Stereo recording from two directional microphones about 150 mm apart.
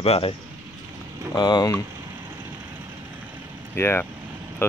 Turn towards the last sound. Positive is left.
turn(degrees=15)  # may be behind; listen again after turning